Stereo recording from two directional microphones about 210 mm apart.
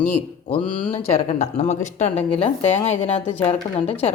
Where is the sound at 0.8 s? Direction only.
25° left (ahead or behind).